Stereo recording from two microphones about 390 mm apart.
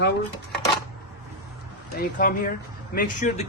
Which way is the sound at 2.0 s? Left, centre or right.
Left.